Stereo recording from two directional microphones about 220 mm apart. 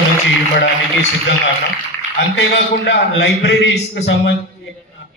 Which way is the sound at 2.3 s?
50° left (ahead or behind).